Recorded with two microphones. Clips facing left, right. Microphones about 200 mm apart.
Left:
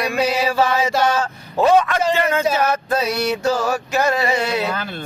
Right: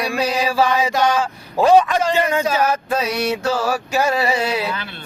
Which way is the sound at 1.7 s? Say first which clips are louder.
Right 3 dB; 15° right (ahead or behind).